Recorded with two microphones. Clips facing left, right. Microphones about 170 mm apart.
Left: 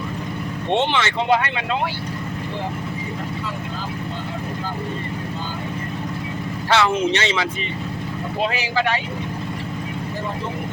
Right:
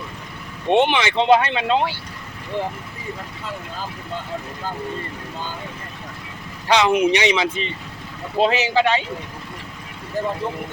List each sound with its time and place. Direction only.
0.7 s speech: 15° right (ahead or behind)
6.7 s speech: 15° right (ahead or behind)